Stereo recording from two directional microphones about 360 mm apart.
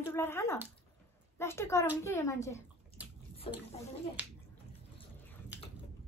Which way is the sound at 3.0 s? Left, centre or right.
Centre.